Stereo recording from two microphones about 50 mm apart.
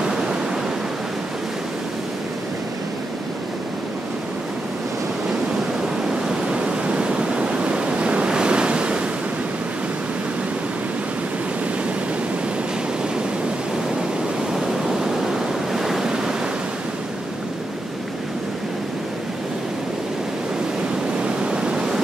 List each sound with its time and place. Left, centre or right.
0.0 s waves: centre
6.0 s waves: centre
14.5 s waves: centre
21.2 s waves: centre